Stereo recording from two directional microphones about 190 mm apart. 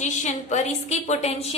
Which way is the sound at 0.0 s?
35° left (ahead or behind).